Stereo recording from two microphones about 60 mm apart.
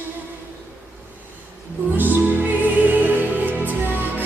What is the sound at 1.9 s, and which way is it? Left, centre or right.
Music, right.